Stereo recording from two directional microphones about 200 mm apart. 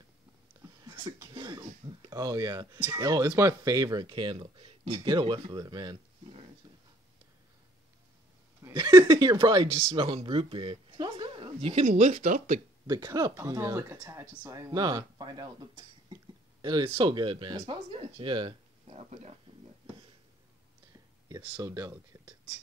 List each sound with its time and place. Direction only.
0.6 s speech: 15° right (ahead or behind)
8.6 s speech: 20° right (ahead or behind); by 12.6 s 40° right (ahead or behind)
12.8 s speech: 20° right (ahead or behind)
14.7 s speech: 20° right (ahead or behind)
21.5 s speech: 15° right (ahead or behind)